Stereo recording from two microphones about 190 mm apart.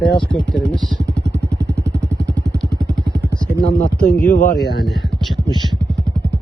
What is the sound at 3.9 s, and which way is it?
Speech, 5° left (ahead or behind).